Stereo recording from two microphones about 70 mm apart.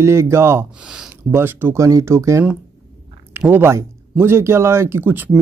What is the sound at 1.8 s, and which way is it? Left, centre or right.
Speech, right.